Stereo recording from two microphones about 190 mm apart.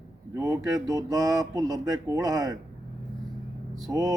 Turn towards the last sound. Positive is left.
turn(degrees=-20)  # may be behind; listen again after turning